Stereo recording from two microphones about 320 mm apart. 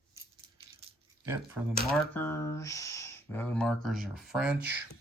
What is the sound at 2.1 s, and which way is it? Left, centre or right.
Speech, centre.